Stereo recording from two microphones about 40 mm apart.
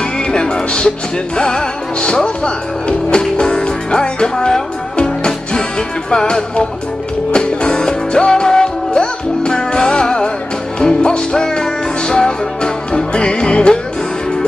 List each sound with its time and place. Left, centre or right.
0.3 s music: centre